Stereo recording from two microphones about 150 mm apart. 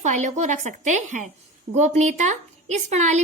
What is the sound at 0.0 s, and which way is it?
A woman's voice, 55° right (ahead or behind).